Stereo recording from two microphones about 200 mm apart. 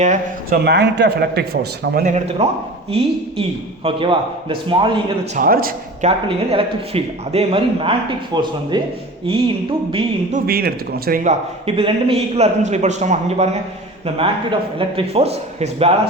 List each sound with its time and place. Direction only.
0.0 s a man's voice: 35° right (ahead or behind)
0.6 s a man's voice: 55° right (ahead or behind)
2.4 s a man's voice: 30° right (ahead or behind)
5.3 s speech: 45° right (ahead or behind)
6.1 s a man's voice: 25° right (ahead or behind)
10.3 s a man's voice: 50° right (ahead or behind); by 13.6 s 35° right (ahead or behind)
14.8 s a man's voice: 30° right (ahead or behind)